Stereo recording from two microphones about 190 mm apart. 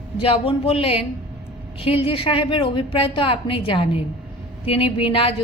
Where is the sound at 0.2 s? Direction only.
30° left (ahead or behind).